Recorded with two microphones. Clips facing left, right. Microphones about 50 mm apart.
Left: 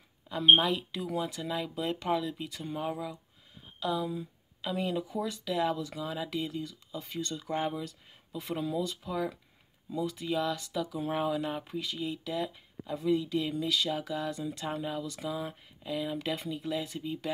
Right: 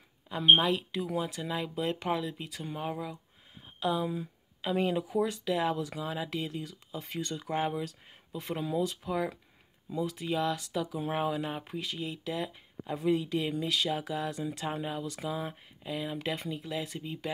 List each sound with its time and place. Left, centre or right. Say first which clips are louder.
0.6 s speech: right 1 dB; centre
3.8 s a sound: right 1 dB; right
4.7 s speech: right 3 dB; right
5.5 s speech: left 2 dB; centre
5.8 s speech: right 1 dB; right; by 12.5 s centre
12.8 s speech: even; right; by 17.3 s centre